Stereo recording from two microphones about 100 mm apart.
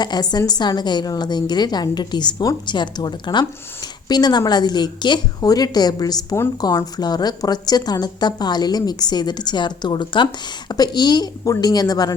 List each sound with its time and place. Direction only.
0.0 s a woman's voice: 45° left (ahead or behind)
5.4 s a woman's voice: 40° left (ahead or behind)